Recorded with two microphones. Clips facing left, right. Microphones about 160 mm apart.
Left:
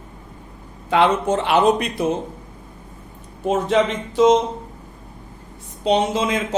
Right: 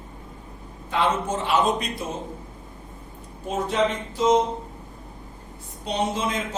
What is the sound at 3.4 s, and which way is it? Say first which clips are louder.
Speech: left 7 dB; 75° left (ahead or behind).